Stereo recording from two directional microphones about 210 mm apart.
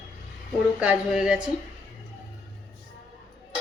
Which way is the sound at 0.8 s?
5° right (ahead or behind).